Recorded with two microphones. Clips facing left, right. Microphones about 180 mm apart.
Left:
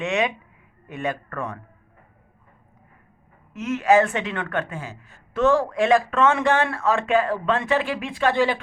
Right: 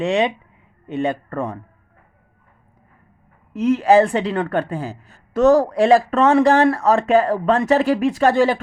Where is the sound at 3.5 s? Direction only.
35° right (ahead or behind).